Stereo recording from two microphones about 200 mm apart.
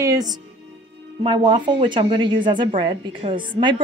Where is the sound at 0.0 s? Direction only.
20° right (ahead or behind).